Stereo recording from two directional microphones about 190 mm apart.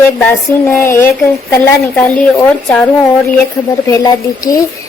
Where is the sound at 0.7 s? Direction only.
10° left (ahead or behind).